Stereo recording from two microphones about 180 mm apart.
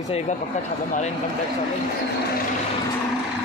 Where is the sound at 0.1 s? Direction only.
35° left (ahead or behind).